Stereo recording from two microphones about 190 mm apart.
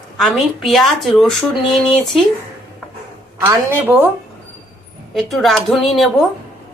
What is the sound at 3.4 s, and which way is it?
Speech, 20° right (ahead or behind).